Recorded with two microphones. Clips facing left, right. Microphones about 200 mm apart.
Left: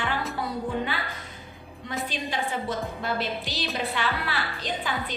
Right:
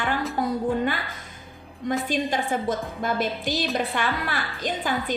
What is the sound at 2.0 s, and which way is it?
A woman's voice, 45° right (ahead or behind).